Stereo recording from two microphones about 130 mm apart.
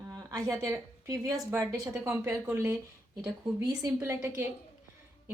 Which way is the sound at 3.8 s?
20° right (ahead or behind).